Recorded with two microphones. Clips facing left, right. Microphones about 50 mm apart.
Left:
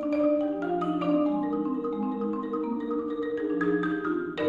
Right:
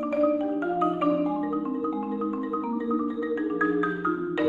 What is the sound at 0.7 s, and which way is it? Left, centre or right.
Marimba, right.